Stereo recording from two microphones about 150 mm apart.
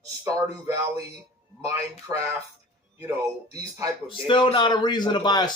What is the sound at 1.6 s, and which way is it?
Speech, 20° right (ahead or behind).